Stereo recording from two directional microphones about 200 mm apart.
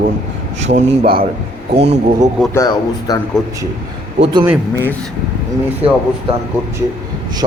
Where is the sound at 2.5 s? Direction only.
20° left (ahead or behind).